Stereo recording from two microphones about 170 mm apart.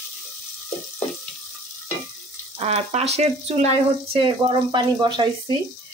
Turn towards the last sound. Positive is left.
turn(degrees=-25)  # may be behind; listen again after turning